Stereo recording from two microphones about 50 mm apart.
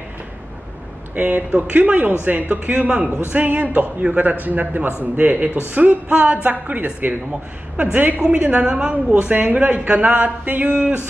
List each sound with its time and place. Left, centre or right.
1.1 s a woman's voice: right
8.2 s a woman's voice: right